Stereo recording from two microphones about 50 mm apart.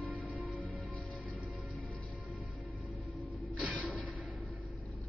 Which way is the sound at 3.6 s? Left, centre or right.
Left.